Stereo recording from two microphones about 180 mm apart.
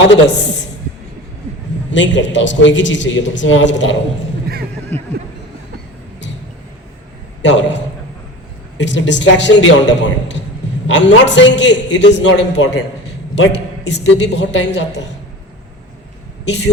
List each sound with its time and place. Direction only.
1.9 s a man's voice: 90° left
7.4 s a man's voice: 85° left
8.8 s a man's voice: 85° left